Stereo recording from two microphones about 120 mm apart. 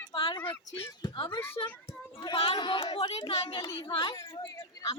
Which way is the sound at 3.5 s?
45° left (ahead or behind).